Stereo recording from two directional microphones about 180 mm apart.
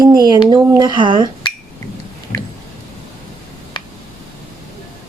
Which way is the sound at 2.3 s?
20° left (ahead or behind).